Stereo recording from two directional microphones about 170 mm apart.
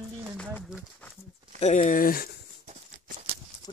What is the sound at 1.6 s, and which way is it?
Speech, 45° left (ahead or behind).